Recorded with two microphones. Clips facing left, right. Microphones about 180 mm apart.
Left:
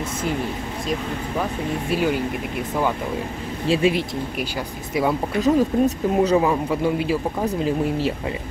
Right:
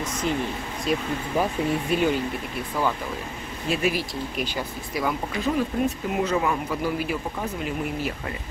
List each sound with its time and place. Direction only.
1.9 s speech: 5° left (ahead or behind)
3.6 s a man's voice: 30° left (ahead or behind)
5.4 s speech: 40° left (ahead or behind)
6.3 s a man's voice: 25° left (ahead or behind)